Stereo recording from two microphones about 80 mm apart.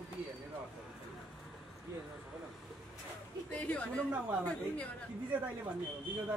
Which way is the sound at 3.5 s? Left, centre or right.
Centre.